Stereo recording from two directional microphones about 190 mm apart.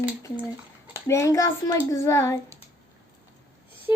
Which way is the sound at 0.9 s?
15° left (ahead or behind).